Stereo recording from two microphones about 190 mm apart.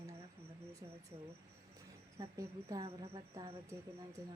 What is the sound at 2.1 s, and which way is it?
Speech, 15° right (ahead or behind).